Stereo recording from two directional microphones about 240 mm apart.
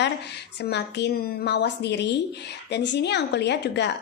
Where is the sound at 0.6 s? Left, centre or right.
Left.